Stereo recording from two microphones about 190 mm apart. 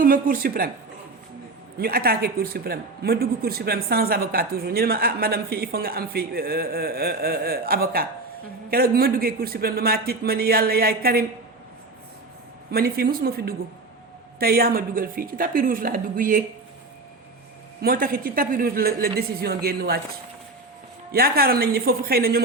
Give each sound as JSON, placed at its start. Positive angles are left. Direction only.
{"t": 0.0, "sound": "speech", "side_deg": -50}
{"t": 1.8, "sound": "speech", "side_deg": -55}
{"t": 12.7, "sound": "speech", "side_deg": -55}
{"t": 17.8, "sound": "speech", "side_deg": -50}
{"t": 21.1, "sound": "speech", "side_deg": -50}